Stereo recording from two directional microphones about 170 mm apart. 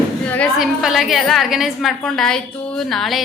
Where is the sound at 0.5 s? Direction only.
Centre (ahead or behind).